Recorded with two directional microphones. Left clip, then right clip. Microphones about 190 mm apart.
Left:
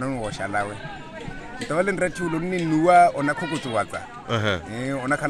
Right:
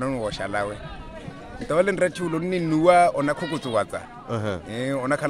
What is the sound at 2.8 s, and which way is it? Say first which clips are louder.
Speech: left 1 dB; 20° right (ahead or behind).